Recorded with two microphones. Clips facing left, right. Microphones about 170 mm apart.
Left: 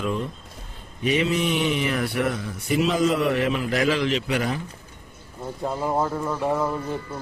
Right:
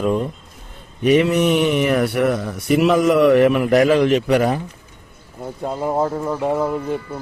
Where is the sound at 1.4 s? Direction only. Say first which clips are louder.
Right 7 dB; 45° right (ahead or behind).